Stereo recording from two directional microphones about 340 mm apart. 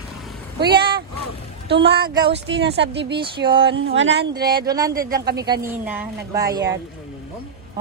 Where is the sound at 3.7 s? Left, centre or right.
Right.